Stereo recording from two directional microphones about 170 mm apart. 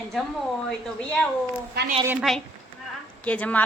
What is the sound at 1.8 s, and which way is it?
Speech, 80° right.